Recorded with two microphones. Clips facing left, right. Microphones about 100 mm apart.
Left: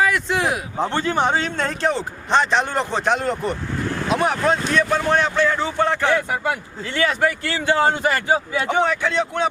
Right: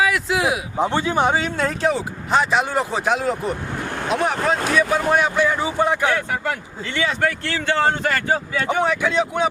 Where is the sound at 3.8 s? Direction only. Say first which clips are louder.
Left 3 dB; 20° right (ahead or behind).